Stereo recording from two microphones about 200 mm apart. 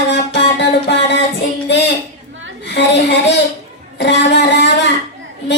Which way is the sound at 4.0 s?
60° left (ahead or behind).